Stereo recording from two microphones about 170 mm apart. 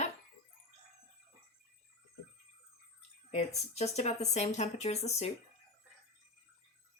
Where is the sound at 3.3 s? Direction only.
40° left (ahead or behind).